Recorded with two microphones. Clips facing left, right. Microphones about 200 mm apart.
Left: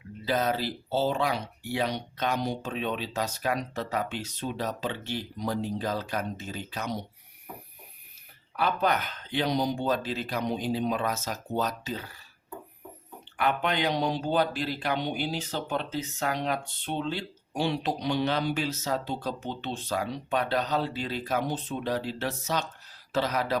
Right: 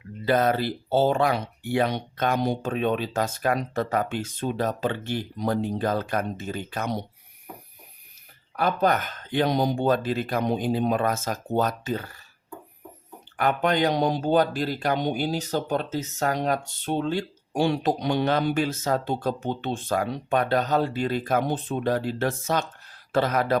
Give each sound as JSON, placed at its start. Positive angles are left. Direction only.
{"t": 0.3, "sound": "speech", "side_deg": -55}
{"t": 8.5, "sound": "speech", "side_deg": -45}
{"t": 13.3, "sound": "speech", "side_deg": -45}